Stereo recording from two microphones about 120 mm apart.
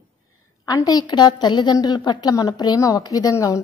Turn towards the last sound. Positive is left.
turn(degrees=25)  # may be behind; listen again after turning